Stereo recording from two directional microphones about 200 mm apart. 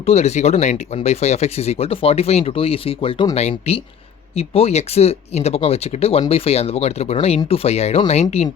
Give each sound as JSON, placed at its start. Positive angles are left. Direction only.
{"t": 0.0, "sound": "speech", "side_deg": 35}